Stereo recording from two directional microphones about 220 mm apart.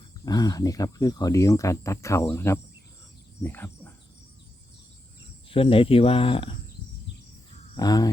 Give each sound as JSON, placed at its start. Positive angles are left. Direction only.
{"t": 0.3, "sound": "speech", "side_deg": 20}
{"t": 5.5, "sound": "speech", "side_deg": 25}
{"t": 7.8, "sound": "speech", "side_deg": 15}